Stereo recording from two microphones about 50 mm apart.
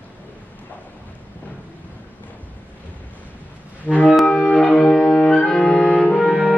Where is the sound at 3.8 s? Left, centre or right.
Left.